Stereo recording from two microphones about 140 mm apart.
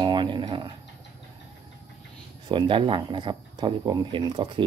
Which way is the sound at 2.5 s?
35° right (ahead or behind).